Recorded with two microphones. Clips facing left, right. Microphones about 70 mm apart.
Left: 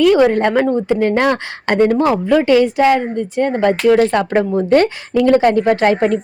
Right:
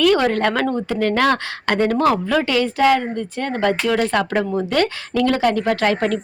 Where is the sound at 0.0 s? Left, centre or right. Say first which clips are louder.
Left 5 dB; centre.